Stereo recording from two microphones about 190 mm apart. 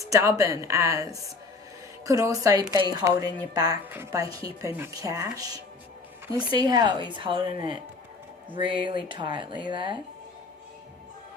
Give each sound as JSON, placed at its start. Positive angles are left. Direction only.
{"t": 0.0, "sound": "a woman's voice", "side_deg": -15}
{"t": 8.5, "sound": "speech", "side_deg": -25}